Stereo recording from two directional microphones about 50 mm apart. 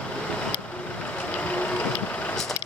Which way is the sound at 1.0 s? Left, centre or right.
Left.